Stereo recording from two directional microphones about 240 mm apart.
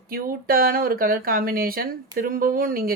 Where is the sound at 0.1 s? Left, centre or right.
Right.